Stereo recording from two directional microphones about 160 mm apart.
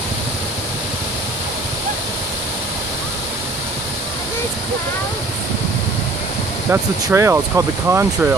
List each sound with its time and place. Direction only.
6.7 s speech: 15° right (ahead or behind)